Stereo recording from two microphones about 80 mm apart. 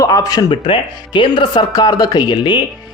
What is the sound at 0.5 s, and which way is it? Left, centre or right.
Speech, left.